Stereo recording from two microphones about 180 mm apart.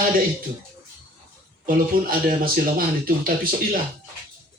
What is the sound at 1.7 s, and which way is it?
Speech, 50° right (ahead or behind).